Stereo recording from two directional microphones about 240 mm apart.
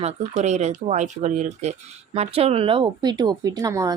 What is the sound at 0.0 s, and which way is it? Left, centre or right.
Speech, right.